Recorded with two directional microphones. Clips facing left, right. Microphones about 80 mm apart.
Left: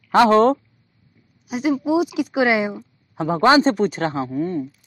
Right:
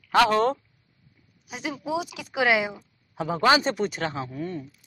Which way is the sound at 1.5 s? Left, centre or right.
Centre.